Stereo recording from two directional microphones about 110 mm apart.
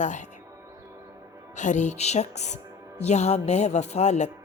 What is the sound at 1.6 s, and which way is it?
Speech, 90° left.